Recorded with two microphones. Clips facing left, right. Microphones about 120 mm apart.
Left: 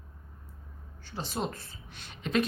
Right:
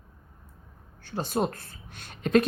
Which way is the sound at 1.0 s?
50° right (ahead or behind).